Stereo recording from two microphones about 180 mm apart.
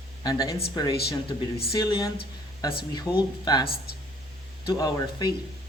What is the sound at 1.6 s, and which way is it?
Speech, 20° left (ahead or behind).